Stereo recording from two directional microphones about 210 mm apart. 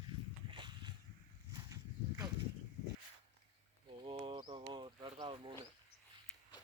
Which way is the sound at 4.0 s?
25° right (ahead or behind).